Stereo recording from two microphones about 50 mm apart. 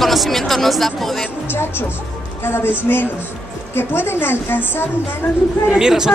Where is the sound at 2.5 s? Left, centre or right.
Left.